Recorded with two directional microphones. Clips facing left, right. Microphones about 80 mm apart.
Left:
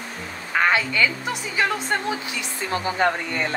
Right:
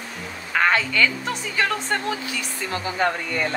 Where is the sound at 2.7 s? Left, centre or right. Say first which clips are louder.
Left 2 dB; left.